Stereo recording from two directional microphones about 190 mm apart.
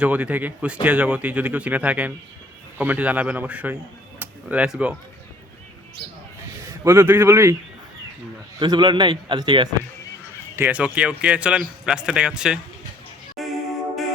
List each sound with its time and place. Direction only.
0.0 s speech: 5° right (ahead or behind)
6.7 s a man's voice: 15° right (ahead or behind)
8.5 s a man's voice: 20° right (ahead or behind)
10.5 s speech: 10° right (ahead or behind)
13.4 s music: centre (ahead or behind)